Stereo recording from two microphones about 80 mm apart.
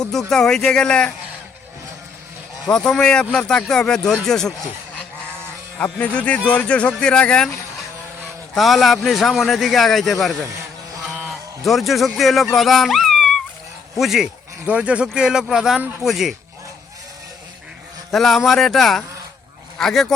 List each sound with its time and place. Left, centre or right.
0.0 s speech: centre
2.6 s speech: centre
5.8 s speech: centre
8.5 s a man's voice: centre
18.1 s a man's voice: centre